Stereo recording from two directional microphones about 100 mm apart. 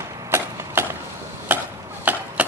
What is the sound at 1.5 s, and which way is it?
Chopping, 20° right (ahead or behind).